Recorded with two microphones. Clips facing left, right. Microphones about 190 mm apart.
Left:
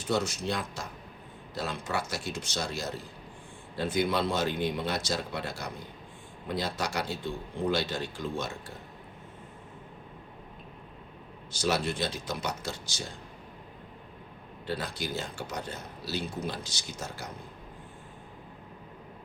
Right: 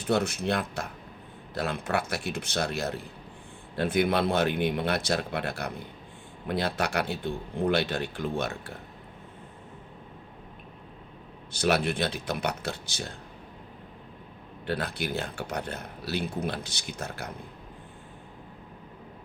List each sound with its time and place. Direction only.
0.0 s speech: 60° right (ahead or behind)
11.5 s speech: 60° right (ahead or behind)
14.7 s speech: 60° right (ahead or behind)